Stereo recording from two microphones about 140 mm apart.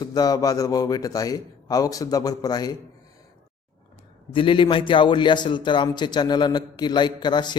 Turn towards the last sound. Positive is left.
turn(degrees=30)  # may be behind; listen again after turning